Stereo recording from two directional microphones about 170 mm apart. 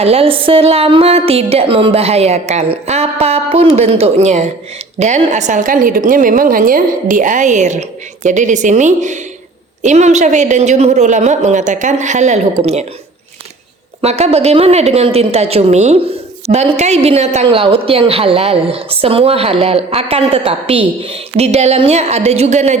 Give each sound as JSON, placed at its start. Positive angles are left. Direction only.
{"t": 0.0, "sound": "a woman's voice", "side_deg": -35}
{"t": 14.0, "sound": "speech", "side_deg": -40}